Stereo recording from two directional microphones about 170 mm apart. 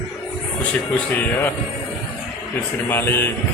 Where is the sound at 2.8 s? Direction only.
15° left (ahead or behind).